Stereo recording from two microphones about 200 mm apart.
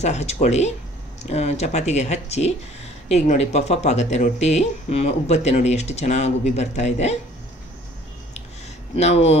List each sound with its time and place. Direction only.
0.0 s speech: 35° left (ahead or behind)
8.9 s speech: 30° left (ahead or behind)